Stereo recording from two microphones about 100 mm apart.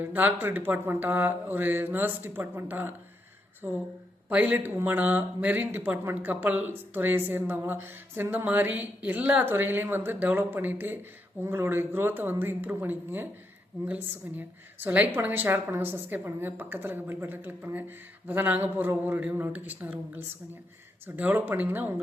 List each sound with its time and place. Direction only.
0.1 s speech: 20° right (ahead or behind)
4.3 s a woman's voice: 15° right (ahead or behind)